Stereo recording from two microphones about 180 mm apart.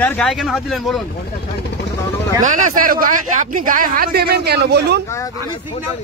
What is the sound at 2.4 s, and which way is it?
Speech, 45° right (ahead or behind).